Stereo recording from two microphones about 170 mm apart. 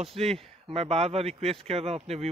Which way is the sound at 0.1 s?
35° right (ahead or behind).